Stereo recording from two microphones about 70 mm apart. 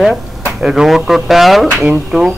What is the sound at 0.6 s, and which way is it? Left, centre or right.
Speech, centre.